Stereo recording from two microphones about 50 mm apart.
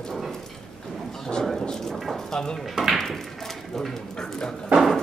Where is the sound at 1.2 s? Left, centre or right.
Centre.